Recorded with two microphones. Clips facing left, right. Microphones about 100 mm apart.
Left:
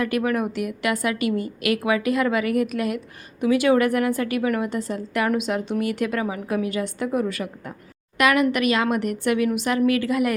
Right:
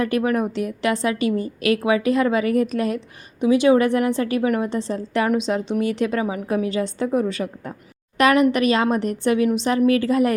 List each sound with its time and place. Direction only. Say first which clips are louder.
0.0 s a woman's voice: right 2 dB; 30° right (ahead or behind)